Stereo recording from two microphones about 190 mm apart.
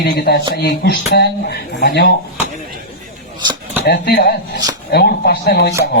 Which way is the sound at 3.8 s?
55° left (ahead or behind).